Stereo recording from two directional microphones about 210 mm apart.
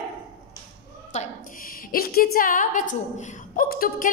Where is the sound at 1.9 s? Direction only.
45° left (ahead or behind).